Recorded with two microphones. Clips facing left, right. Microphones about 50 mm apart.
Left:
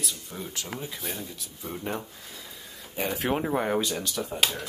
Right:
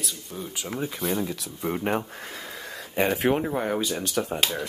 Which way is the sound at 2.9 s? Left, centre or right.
Right.